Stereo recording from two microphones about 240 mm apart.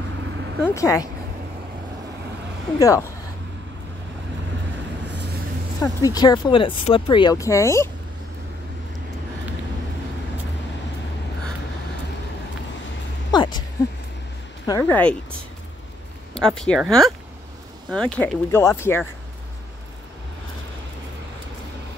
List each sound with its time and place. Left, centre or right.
0.7 s speech: centre
2.8 s speech: centre
5.8 s speech: centre
13.3 s a sound: centre
14.7 s speech: centre
16.3 s speech: centre